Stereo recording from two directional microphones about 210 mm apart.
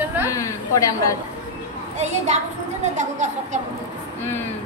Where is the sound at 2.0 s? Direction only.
30° right (ahead or behind).